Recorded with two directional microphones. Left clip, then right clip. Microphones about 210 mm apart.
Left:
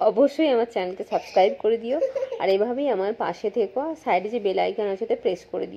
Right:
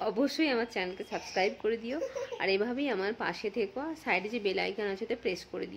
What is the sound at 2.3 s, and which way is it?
Speech, 10° right (ahead or behind).